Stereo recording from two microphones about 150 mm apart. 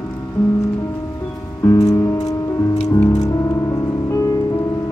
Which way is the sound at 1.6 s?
20° left (ahead or behind).